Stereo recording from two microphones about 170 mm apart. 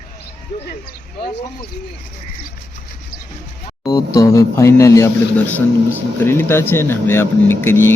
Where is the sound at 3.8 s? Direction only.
20° left (ahead or behind).